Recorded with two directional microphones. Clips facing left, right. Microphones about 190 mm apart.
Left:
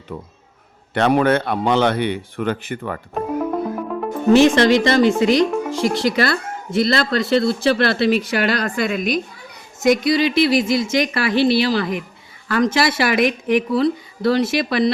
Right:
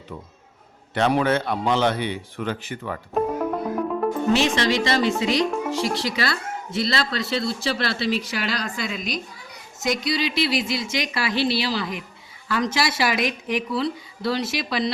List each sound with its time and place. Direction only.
0.9 s a man's voice: 55° left (ahead or behind)
4.3 s speech: 50° left (ahead or behind)